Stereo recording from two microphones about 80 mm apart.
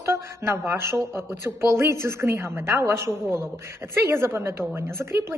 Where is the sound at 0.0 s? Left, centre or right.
Right.